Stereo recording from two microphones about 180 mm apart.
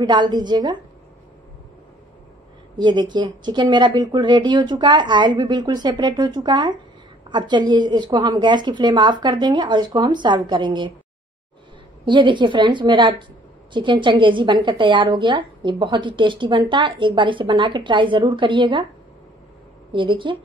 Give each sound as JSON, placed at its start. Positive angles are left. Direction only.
{"t": 0.0, "sound": "a woman's voice", "side_deg": -25}
{"t": 2.8, "sound": "a woman's voice", "side_deg": -25}
{"t": 12.0, "sound": "a woman's voice", "side_deg": -25}
{"t": 19.9, "sound": "a woman's voice", "side_deg": -25}